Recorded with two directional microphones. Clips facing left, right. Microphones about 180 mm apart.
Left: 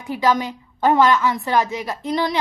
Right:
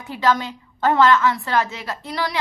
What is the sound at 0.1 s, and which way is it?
A woman's voice, 15° left (ahead or behind).